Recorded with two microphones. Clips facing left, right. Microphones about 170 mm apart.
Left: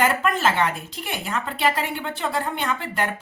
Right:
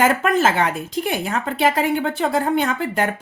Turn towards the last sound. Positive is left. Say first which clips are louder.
# right 4 dB
turn(degrees=-45)  # may be behind; listen again after turning